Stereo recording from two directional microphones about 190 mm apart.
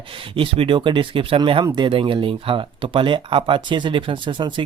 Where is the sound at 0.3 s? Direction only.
30° right (ahead or behind).